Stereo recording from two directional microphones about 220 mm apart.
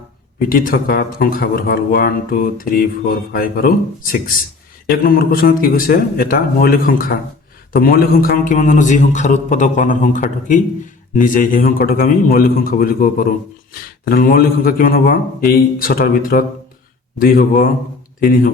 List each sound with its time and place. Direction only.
0.3 s speech: 40° left (ahead or behind)